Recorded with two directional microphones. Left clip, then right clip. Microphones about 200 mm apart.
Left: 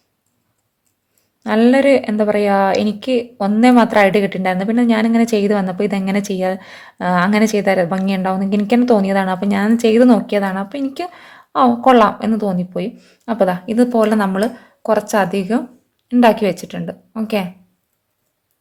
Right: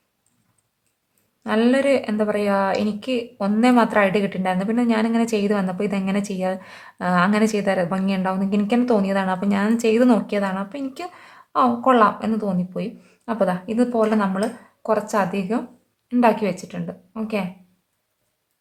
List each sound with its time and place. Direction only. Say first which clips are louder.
1.5 s speech: left 6 dB; 20° left (ahead or behind)